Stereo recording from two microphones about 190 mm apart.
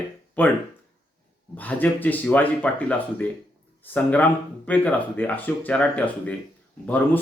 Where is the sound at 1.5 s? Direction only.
10° left (ahead or behind).